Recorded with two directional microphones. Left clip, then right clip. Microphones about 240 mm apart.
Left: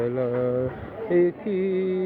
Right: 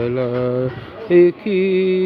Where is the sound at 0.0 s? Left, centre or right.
Right.